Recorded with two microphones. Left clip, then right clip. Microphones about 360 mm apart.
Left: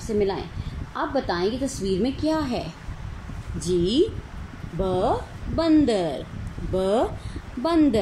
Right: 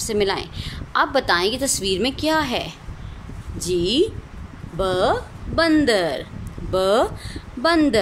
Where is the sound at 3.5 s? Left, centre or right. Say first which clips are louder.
Right 2 dB; right.